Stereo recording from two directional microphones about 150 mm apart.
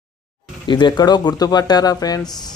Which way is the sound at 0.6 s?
30° left (ahead or behind).